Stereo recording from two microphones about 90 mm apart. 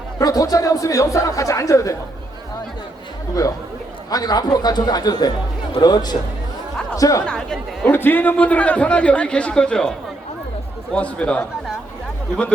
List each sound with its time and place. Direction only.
0.2 s speech: 40° left (ahead or behind)
4.1 s a man's voice: 45° left (ahead or behind)
7.3 s a man's voice: 10° left (ahead or behind)
7.9 s a man's voice: 25° left (ahead or behind)
10.9 s a man's voice: 15° left (ahead or behind)